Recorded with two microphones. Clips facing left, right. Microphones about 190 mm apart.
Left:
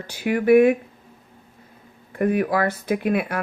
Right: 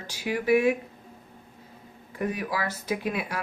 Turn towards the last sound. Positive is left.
turn(degrees=55)  # may be behind; listen again after turning